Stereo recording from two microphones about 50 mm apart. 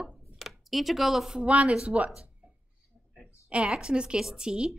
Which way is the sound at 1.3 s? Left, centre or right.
Right.